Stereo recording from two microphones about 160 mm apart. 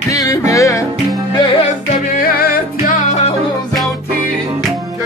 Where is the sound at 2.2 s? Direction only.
70° left (ahead or behind).